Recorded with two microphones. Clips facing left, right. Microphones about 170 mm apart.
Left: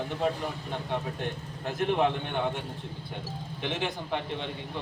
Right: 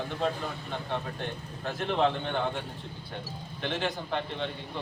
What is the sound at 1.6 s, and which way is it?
Speech, 15° left (ahead or behind).